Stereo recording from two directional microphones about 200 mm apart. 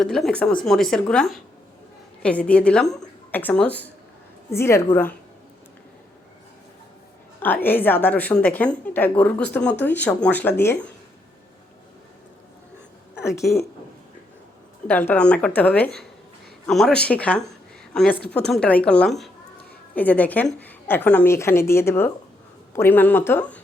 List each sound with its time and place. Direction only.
0.0 s a woman's voice: centre (ahead or behind)
7.3 s a woman's voice: 10° left (ahead or behind)
13.4 s a woman's voice: centre (ahead or behind)
14.8 s a woman's voice: 10° left (ahead or behind)
18.2 s a woman's voice: 55° left (ahead or behind)
18.4 s a woman's voice: 5° left (ahead or behind)